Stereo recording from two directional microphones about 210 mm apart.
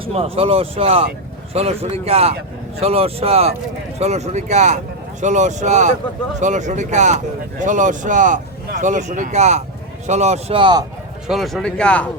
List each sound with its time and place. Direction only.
0.0 s speech: 30° right (ahead or behind)
11.3 s speech: centre (ahead or behind)